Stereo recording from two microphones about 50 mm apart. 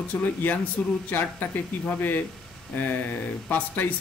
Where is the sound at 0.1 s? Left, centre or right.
Left.